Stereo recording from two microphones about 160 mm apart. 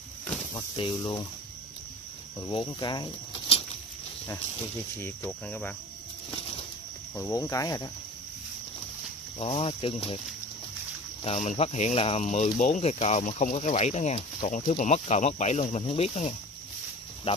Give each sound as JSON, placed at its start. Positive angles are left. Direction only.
{"t": 0.7, "sound": "speech", "side_deg": 30}
{"t": 2.5, "sound": "speech", "side_deg": 30}
{"t": 4.9, "sound": "cricket", "side_deg": 10}
{"t": 7.2, "sound": "speech", "side_deg": 20}
{"t": 9.4, "sound": "speech", "side_deg": 40}
{"t": 11.2, "sound": "speech", "side_deg": 40}